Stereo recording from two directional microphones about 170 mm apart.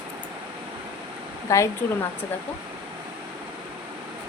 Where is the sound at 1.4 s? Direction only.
15° left (ahead or behind).